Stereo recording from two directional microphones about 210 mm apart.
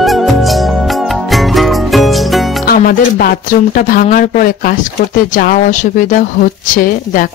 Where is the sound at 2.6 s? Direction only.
45° left (ahead or behind).